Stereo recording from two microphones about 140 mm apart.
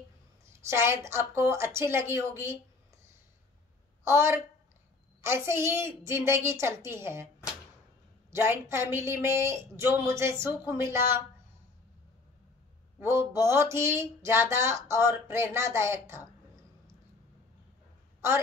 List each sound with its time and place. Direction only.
0.7 s speech: 20° right (ahead or behind)
4.0 s a woman's voice: 20° right (ahead or behind)
8.3 s a woman's voice: 20° right (ahead or behind)
13.0 s a woman's voice: 20° right (ahead or behind)